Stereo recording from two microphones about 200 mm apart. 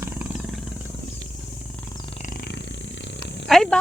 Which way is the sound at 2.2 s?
45° left (ahead or behind).